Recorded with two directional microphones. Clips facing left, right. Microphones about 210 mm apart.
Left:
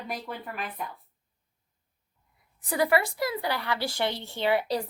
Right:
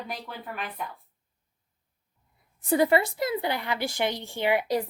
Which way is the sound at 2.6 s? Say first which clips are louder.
Right 3 dB; 25° right (ahead or behind).